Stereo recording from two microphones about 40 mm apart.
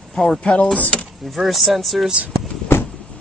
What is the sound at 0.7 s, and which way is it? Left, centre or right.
Speech, left.